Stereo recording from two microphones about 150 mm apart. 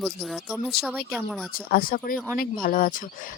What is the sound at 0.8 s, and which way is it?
Speech, centre (ahead or behind).